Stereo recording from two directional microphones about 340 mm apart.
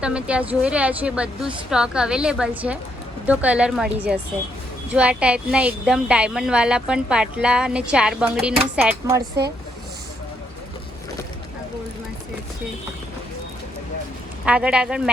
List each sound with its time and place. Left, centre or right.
0.0 s speech: centre
14.4 s speech: centre